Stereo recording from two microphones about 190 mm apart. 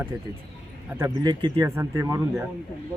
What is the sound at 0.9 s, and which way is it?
Speech, 15° right (ahead or behind).